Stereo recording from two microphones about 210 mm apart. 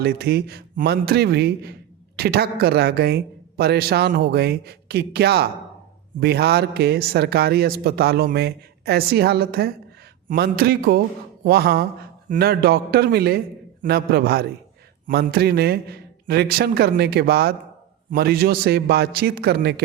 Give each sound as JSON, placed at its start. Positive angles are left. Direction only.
{"t": 0.0, "sound": "a man's voice", "side_deg": -50}